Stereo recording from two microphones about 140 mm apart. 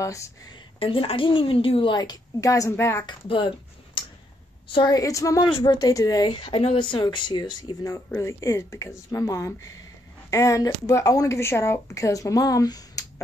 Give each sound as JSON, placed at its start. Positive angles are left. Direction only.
{"t": 0.0, "sound": "a woman's voice", "side_deg": 20}
{"t": 0.7, "sound": "a woman's voice", "side_deg": 40}
{"t": 3.1, "sound": "a woman's voice", "side_deg": 35}
{"t": 4.9, "sound": "a woman's voice", "side_deg": 25}